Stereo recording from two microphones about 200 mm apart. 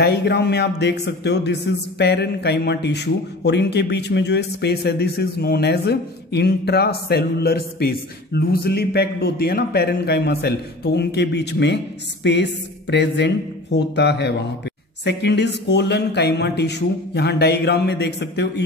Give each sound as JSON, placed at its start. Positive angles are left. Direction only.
{"t": 0.0, "sound": "speech", "side_deg": 55}